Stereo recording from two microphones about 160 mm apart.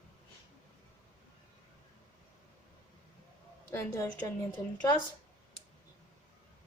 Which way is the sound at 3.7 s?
15° left (ahead or behind).